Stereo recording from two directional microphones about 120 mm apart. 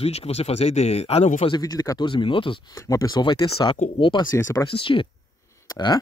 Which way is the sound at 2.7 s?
25° left (ahead or behind).